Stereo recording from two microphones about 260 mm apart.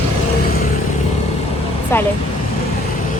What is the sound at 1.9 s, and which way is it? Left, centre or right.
Speech, centre.